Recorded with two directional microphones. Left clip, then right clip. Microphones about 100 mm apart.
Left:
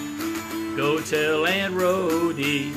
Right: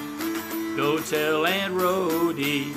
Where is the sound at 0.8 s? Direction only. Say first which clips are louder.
Left 2 dB; 40° right (ahead or behind).